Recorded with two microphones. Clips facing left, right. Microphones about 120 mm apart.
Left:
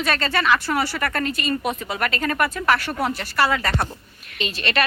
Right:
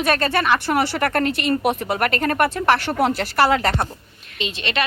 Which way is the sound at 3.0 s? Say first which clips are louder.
Right 5 dB; 90° right.